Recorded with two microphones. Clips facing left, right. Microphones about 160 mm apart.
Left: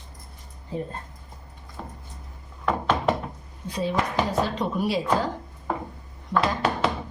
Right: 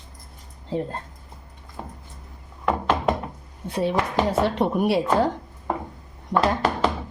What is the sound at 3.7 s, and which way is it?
A woman's voice, 60° right (ahead or behind).